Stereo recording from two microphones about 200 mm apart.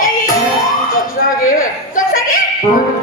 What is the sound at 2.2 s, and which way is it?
Music, 45° left (ahead or behind).